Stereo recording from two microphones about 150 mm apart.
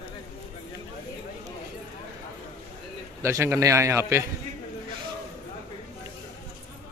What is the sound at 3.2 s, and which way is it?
A man's voice, 20° right (ahead or behind).